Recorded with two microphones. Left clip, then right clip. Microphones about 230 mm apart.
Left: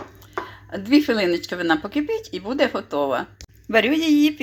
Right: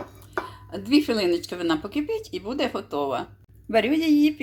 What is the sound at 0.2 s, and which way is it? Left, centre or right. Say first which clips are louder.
Speech: left 1 dB; centre.